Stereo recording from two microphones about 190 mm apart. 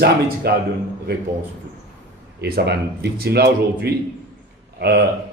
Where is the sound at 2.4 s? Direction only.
60° right (ahead or behind).